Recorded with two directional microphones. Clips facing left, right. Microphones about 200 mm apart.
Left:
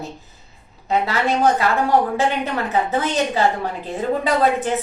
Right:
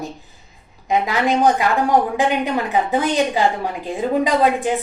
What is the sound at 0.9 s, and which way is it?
A woman's voice, 15° right (ahead or behind).